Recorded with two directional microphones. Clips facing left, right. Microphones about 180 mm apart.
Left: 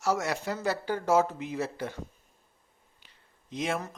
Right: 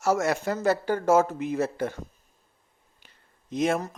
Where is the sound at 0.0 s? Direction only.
50° right (ahead or behind).